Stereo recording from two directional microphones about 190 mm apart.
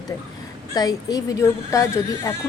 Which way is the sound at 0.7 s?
20° left (ahead or behind).